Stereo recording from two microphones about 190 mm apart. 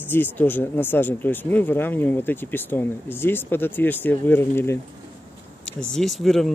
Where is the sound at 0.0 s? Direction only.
10° left (ahead or behind).